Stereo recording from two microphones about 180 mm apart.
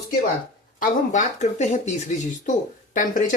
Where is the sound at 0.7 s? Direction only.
45° left (ahead or behind).